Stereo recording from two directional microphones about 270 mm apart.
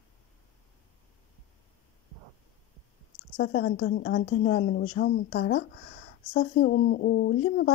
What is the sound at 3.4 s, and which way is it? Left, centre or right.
A woman's voice, left.